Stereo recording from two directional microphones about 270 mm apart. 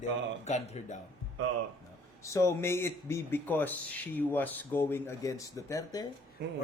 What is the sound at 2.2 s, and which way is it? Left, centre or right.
Speech, centre.